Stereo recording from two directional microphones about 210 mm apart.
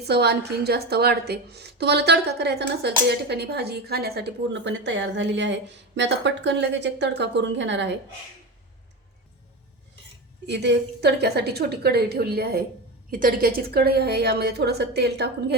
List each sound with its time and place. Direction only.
0.0 s a woman's voice: 50° right (ahead or behind)
10.4 s a woman's voice: 55° right (ahead or behind)